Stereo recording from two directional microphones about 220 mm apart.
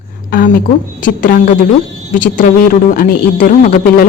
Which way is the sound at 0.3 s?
40° left (ahead or behind).